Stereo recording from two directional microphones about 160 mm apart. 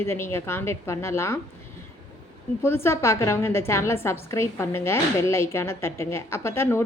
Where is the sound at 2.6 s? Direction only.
15° left (ahead or behind).